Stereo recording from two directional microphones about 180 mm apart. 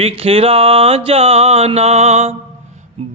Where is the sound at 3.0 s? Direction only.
35° right (ahead or behind).